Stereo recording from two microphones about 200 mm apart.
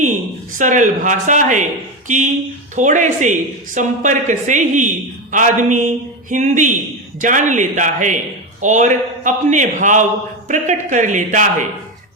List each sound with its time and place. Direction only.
0.6 s a man's voice: 40° right (ahead or behind)